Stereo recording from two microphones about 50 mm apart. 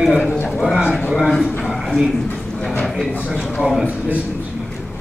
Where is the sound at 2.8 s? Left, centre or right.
Centre.